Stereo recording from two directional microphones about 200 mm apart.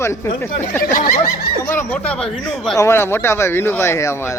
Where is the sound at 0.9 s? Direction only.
45° left (ahead or behind).